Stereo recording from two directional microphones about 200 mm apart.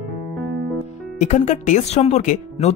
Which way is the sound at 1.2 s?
35° left (ahead or behind).